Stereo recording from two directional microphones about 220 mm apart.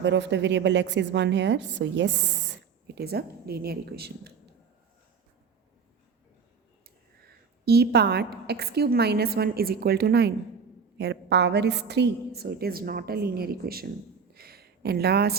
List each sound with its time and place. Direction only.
0.0 s a woman's voice: 55° right (ahead or behind)
7.3 s a woman's voice: 45° right (ahead or behind)
14.3 s a sound: 45° right (ahead or behind)